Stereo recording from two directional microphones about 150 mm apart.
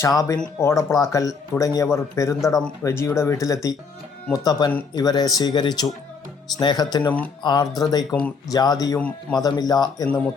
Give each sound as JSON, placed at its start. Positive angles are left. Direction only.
{"t": 0.0, "sound": "speech", "side_deg": 20}